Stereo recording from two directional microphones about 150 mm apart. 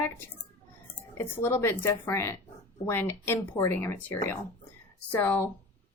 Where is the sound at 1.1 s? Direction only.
15° left (ahead or behind).